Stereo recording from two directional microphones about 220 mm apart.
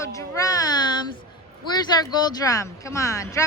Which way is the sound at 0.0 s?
15° left (ahead or behind).